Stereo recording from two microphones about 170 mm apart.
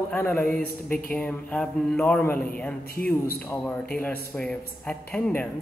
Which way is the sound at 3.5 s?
10° left (ahead or behind).